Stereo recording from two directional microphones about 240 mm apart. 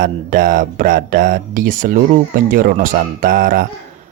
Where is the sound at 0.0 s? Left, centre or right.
Right.